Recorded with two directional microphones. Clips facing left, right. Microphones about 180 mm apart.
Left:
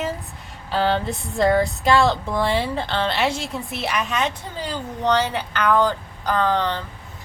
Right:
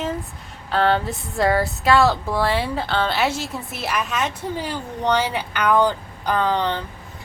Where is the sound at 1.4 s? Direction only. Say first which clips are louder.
Left 1 dB; 5° right (ahead or behind).